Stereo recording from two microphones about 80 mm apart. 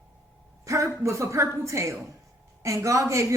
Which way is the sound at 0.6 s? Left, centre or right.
Right.